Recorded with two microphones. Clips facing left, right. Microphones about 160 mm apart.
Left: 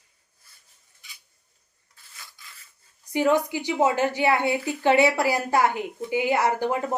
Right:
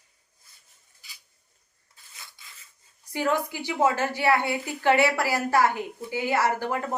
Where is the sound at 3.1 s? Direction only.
20° left (ahead or behind).